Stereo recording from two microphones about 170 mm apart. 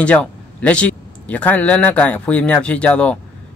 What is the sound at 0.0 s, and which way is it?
Speech, 10° left (ahead or behind).